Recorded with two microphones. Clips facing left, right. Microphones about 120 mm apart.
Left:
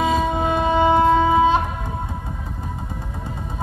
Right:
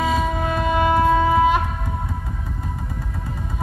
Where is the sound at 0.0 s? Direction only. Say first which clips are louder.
Left 2 dB; 25° left (ahead or behind).